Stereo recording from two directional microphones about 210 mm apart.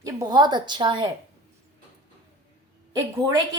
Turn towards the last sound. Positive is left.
turn(degrees=-15)  # may be behind; listen again after turning